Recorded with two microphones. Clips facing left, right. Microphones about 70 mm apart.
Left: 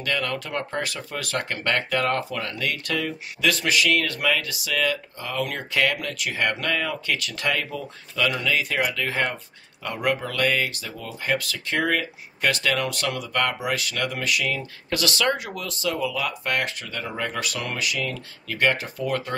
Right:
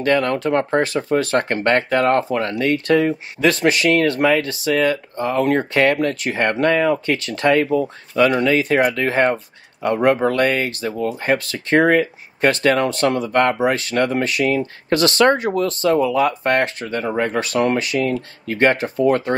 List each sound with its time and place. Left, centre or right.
0.0 s speech: right